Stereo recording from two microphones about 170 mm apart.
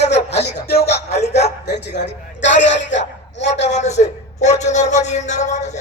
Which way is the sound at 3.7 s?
40° left (ahead or behind).